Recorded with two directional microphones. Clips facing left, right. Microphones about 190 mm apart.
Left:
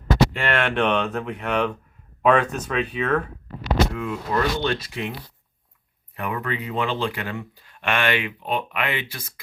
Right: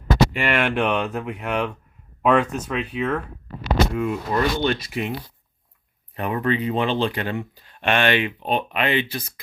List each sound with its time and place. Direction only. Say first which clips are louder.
0.3 s speech: right 1 dB; 10° right (ahead or behind)
3.9 s speech: right 2 dB; 20° right (ahead or behind)
6.1 s speech: right 5 dB; 30° right (ahead or behind)